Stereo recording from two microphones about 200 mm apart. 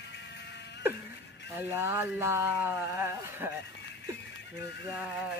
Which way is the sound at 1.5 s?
10° right (ahead or behind).